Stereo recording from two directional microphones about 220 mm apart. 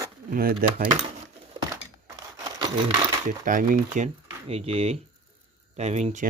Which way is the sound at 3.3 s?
40° right (ahead or behind).